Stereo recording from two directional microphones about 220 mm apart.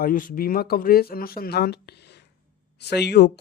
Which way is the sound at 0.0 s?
40° left (ahead or behind).